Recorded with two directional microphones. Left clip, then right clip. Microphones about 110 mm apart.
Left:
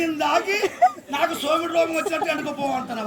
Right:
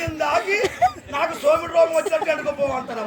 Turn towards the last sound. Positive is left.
turn(degrees=-5)  # may be behind; listen again after turning